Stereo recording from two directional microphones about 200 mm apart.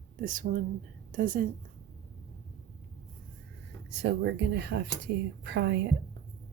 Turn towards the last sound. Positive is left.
turn(degrees=-60)  # may be behind; listen again after turning